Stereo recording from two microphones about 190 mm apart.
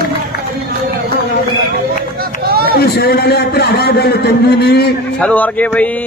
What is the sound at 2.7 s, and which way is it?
A man's voice, 55° left (ahead or behind).